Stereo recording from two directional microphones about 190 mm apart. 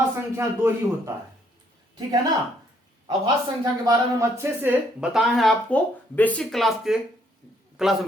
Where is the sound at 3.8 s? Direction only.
20° right (ahead or behind).